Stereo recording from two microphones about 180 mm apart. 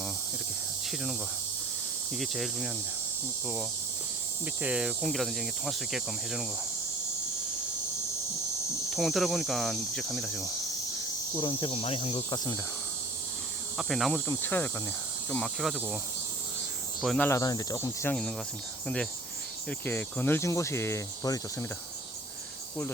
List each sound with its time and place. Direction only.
2.1 s cricket: centre (ahead or behind)
4.6 s cricket: 5° right (ahead or behind)
8.9 s cricket: centre (ahead or behind)
11.3 s speech: 25° left (ahead or behind)
13.7 s cricket: centre (ahead or behind)
14.3 s cricket: 10° left (ahead or behind)
15.4 s cricket: centre (ahead or behind)
17.0 s speech: centre (ahead or behind)
17.2 s cricket: 15° left (ahead or behind)
19.8 s cricket: 10° left (ahead or behind)